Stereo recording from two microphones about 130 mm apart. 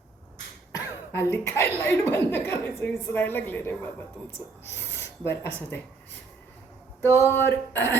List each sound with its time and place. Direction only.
0.7 s speech: 20° left (ahead or behind)
7.0 s speech: 20° right (ahead or behind)
7.3 s speech: 20° left (ahead or behind)